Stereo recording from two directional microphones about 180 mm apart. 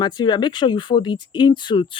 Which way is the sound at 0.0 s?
25° left (ahead or behind).